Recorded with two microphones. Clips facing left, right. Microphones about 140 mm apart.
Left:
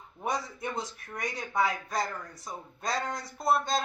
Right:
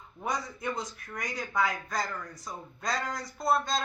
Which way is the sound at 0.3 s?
30° left (ahead or behind).